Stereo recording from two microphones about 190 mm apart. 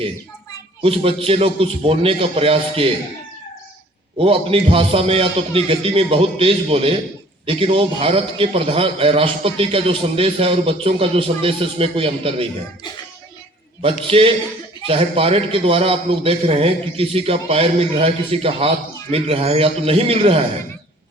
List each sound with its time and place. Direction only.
0.8 s a man's voice: 30° right (ahead or behind)
4.2 s a man's voice: 30° right (ahead or behind)
14.1 s a man's voice: 30° right (ahead or behind)